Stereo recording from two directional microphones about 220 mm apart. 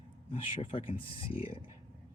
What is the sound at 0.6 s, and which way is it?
Speech, 25° left (ahead or behind).